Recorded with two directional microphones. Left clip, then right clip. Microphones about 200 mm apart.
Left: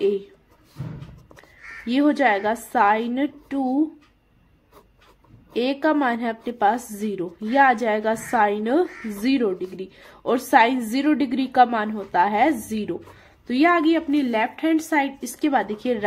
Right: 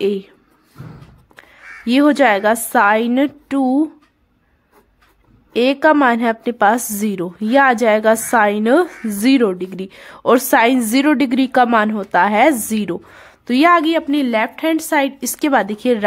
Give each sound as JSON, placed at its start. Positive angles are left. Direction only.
{"t": 0.0, "sound": "a woman's voice", "side_deg": -45}
{"t": 1.9, "sound": "a woman's voice", "side_deg": -50}
{"t": 5.5, "sound": "a woman's voice", "side_deg": -45}